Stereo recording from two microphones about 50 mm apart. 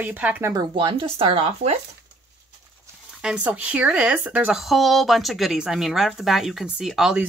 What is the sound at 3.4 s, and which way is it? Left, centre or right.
Speech, right.